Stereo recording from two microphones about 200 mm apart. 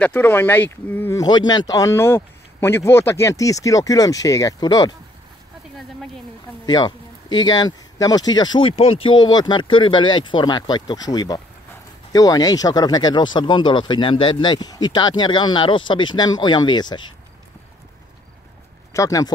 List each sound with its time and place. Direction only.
0.0 s speech: 10° left (ahead or behind)
6.6 s a sound: 20° left (ahead or behind)
7.4 s speech: 20° left (ahead or behind)
18.9 s speech: 15° left (ahead or behind)